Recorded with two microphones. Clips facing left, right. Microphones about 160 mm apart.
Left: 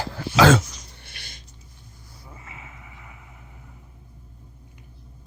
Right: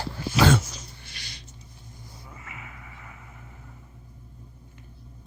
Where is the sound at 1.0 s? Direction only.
55° left (ahead or behind).